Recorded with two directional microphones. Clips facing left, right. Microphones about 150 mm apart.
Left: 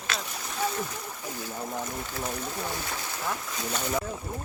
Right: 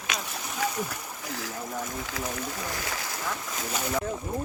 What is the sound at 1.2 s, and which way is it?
Boat, 85° right.